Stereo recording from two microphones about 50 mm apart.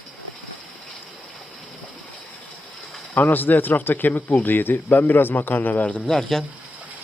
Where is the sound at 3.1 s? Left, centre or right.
Left.